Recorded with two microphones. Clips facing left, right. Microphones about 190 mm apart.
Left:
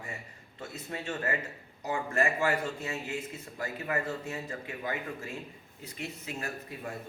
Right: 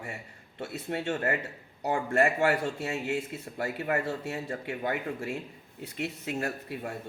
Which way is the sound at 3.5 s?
65° right (ahead or behind).